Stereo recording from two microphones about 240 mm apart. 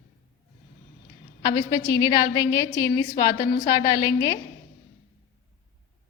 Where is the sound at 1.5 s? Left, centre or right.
Centre.